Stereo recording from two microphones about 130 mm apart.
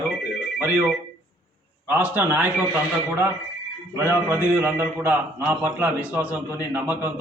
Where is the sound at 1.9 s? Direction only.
15° right (ahead or behind).